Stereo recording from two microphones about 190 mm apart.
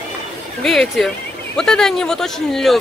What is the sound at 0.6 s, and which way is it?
Speech, centre (ahead or behind).